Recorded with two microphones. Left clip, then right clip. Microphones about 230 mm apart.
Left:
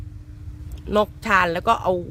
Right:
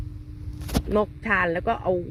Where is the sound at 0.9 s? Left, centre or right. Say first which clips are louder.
Left 5 dB; centre.